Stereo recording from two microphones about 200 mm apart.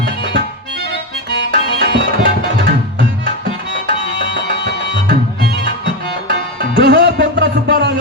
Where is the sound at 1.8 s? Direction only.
60° right (ahead or behind).